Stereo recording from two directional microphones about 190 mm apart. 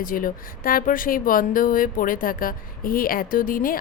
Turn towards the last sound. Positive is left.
turn(degrees=45)  # may be behind; listen again after turning